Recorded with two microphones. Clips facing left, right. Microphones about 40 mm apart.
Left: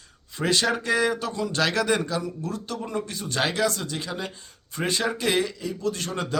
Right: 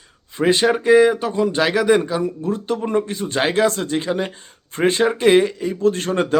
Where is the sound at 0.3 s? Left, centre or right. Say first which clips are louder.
Right 7 dB; right.